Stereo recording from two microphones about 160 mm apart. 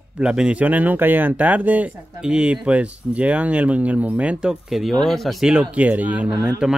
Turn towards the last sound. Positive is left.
turn(degrees=-5)  # may be behind; listen again after turning